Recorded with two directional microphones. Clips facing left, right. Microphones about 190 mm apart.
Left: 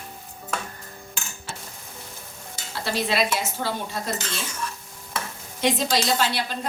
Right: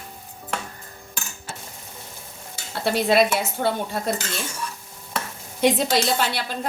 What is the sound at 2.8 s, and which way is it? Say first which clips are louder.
Speech: right 6 dB; 55° right (ahead or behind).